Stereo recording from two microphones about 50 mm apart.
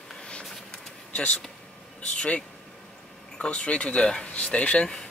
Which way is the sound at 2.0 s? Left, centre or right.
Left.